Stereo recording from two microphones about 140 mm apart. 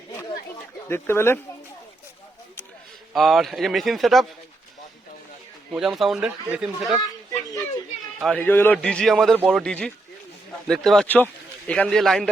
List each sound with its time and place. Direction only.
0.9 s a man's voice: 15° left (ahead or behind)
3.1 s speech: centre (ahead or behind)
5.7 s speech: centre (ahead or behind)
8.2 s speech: 5° left (ahead or behind)
8.4 s a man's voice: 15° left (ahead or behind)